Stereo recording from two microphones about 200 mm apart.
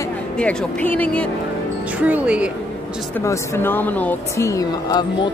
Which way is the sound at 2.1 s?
5° right (ahead or behind).